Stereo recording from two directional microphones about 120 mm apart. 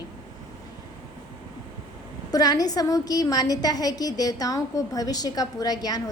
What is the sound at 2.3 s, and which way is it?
A woman's voice, 30° left (ahead or behind).